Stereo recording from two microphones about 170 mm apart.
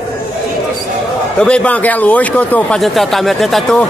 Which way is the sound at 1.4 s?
5° left (ahead or behind).